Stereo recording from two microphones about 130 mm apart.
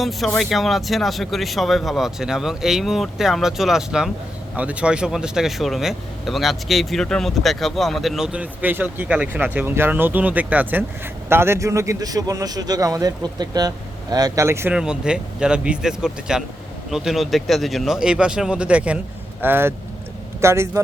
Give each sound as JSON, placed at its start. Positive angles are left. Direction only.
{"t": 0.0, "sound": "a man's voice", "side_deg": 0}
{"t": 14.7, "sound": "a man's voice", "side_deg": -5}